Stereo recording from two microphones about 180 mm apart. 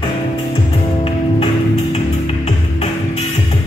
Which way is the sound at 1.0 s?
35° left (ahead or behind).